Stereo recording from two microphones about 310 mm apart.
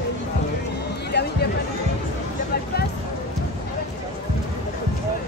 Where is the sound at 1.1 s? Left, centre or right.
Left.